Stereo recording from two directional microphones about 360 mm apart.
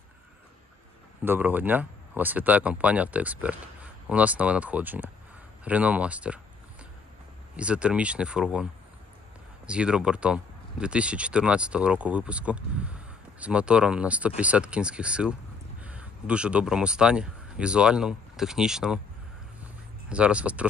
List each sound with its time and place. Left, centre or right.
1.2 s speech: centre
5.6 s a sound: centre
7.5 s speech: centre
9.7 s speech: centre
20.1 s speech: centre